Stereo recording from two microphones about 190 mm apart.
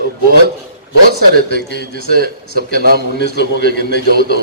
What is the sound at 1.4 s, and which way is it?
A man's voice, 55° right (ahead or behind).